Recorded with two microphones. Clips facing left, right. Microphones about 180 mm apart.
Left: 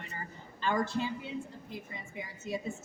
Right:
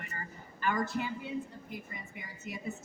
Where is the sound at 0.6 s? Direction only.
25° left (ahead or behind).